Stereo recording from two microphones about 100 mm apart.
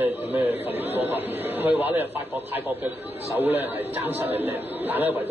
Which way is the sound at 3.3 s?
20° right (ahead or behind).